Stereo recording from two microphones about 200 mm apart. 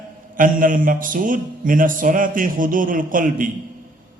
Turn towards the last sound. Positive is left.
turn(degrees=-45)  # may be behind; listen again after turning